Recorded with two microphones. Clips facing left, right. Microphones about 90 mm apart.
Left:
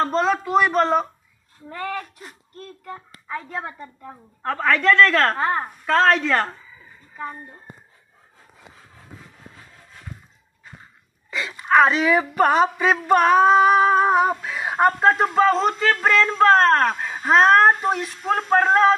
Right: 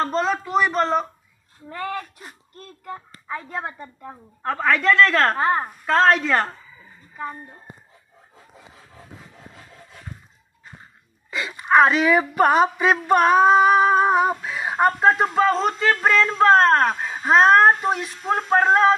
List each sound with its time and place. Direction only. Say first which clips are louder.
0.0 s speech: left 2 dB; centre (ahead or behind)
2.8 s a child's voice: right 6 dB; 20° right (ahead or behind)
11.2 s speech: even; 10° right (ahead or behind)